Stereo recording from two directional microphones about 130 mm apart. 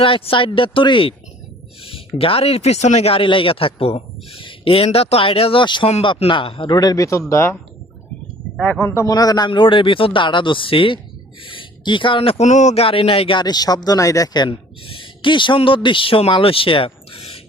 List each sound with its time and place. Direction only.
0.0 s a man's voice: 45° left (ahead or behind); by 7.5 s 20° left (ahead or behind)
8.5 s speech: 5° left (ahead or behind)
8.8 s a man's voice: 25° left (ahead or behind); by 12.5 s 45° left (ahead or behind)
12.5 s speech: 65° left (ahead or behind); by 17.4 s 45° left (ahead or behind)